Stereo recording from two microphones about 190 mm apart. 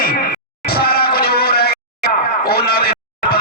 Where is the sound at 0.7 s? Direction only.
55° left (ahead or behind).